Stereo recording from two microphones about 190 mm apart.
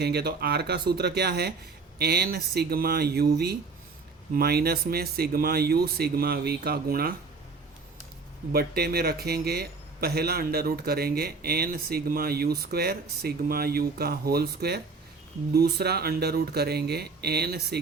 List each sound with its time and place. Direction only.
0.0 s a man's voice: 60° right (ahead or behind)
8.5 s a man's voice: 55° right (ahead or behind)